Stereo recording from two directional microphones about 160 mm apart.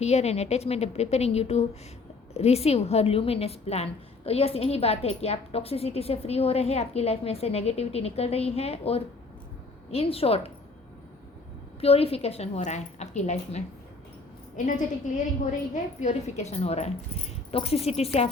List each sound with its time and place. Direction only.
0.0 s a woman's voice: 40° left (ahead or behind)
11.8 s a woman's voice: 40° left (ahead or behind)
14.5 s a woman's voice: 55° left (ahead or behind)